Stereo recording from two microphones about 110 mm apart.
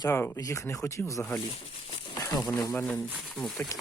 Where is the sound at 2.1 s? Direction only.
30° left (ahead or behind).